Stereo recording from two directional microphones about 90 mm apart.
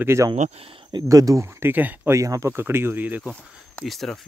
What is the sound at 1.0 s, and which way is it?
Speech, 35° right (ahead or behind).